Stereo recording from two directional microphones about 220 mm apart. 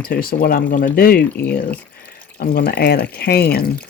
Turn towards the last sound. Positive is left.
turn(degrees=45)  # may be behind; listen again after turning